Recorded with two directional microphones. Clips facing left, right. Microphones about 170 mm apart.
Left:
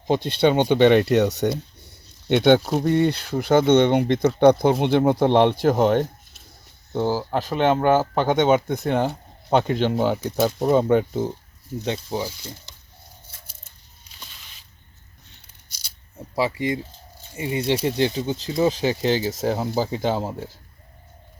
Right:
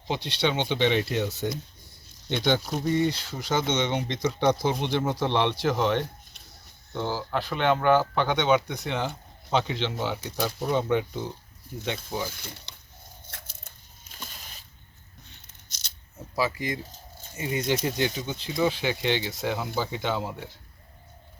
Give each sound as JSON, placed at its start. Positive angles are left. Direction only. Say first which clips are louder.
{"t": 0.1, "sound": "speech", "louder": "left 8 dB", "side_deg": 50}
{"t": 2.3, "sound": "speech", "louder": "left 9 dB", "side_deg": 60}
{"t": 11.9, "sound": "speech", "louder": "left 5 dB", "side_deg": 35}
{"t": 12.3, "sound": "speech", "louder": "left 4 dB", "side_deg": -60}
{"t": 14.0, "sound": "a sound", "louder": "right 3 dB", "side_deg": -45}
{"t": 15.7, "sound": "scissors", "louder": "left 4 dB", "side_deg": 10}
{"t": 16.3, "sound": "speech", "louder": "left 5 dB", "side_deg": 25}